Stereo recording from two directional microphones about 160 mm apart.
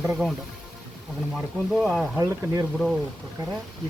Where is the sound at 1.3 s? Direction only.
Centre (ahead or behind).